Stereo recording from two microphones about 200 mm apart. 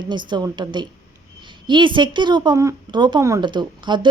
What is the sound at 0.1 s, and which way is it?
A woman's voice, 20° right (ahead or behind).